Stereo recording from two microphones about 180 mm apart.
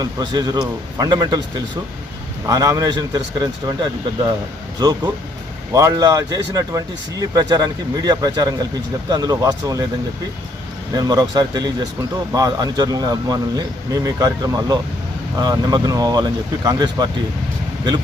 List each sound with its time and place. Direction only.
0.0 s speech: 20° right (ahead or behind)
10.9 s speech: 20° right (ahead or behind)